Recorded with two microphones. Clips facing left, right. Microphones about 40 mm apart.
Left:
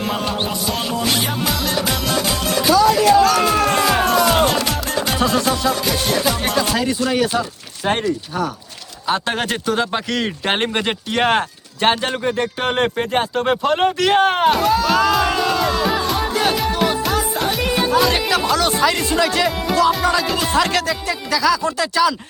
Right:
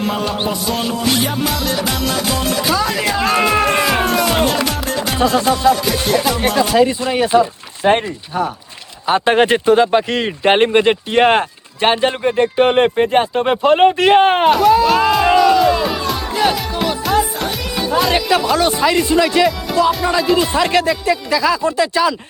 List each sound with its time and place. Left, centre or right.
0.1 s music: centre
3.2 s speech: right
3.7 s music: centre
6.7 s speech: centre
14.4 s music: centre
14.7 s speech: centre
15.4 s music: centre
15.7 s music: centre
18.1 s speech: right
20.1 s speech: centre